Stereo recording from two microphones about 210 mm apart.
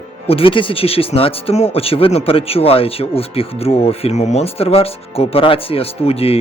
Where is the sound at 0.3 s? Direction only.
25° left (ahead or behind).